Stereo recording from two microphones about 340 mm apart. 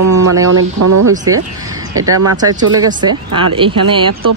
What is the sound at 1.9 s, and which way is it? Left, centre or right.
Speech, right.